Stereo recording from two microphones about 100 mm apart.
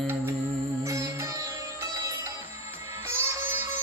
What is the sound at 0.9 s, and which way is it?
Music, 30° right (ahead or behind).